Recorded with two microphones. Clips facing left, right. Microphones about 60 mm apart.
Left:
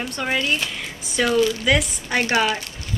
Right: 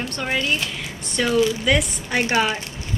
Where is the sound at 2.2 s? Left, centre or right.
Centre.